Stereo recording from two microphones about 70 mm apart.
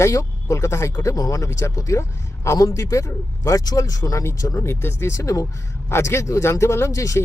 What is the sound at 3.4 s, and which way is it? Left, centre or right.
Speech, left.